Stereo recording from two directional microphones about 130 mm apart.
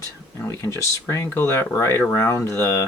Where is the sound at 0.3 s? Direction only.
25° left (ahead or behind).